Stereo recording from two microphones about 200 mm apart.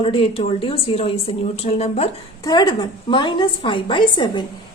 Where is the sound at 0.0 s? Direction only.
25° left (ahead or behind).